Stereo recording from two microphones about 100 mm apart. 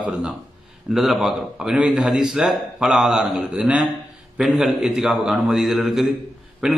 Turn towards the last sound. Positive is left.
turn(degrees=-5)  # may be behind; listen again after turning